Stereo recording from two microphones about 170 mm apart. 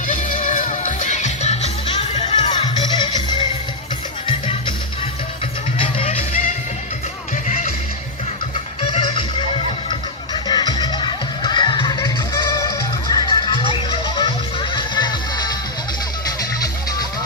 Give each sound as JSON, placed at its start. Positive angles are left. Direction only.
{"t": 0.1, "sound": "music", "side_deg": 50}
{"t": 2.4, "sound": "music", "side_deg": 25}
{"t": 5.8, "sound": "music", "side_deg": 35}
{"t": 7.4, "sound": "music", "side_deg": 50}
{"t": 8.8, "sound": "music", "side_deg": 35}